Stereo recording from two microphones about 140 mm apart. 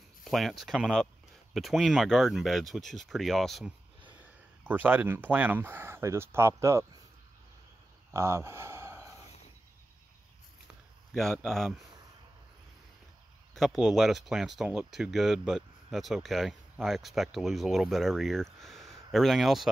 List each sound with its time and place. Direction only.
0.2 s speech: centre (ahead or behind)
4.6 s speech: 15° right (ahead or behind)
8.1 s a sound: 20° right (ahead or behind)
11.4 s speech: centre (ahead or behind)
13.6 s speech: centre (ahead or behind)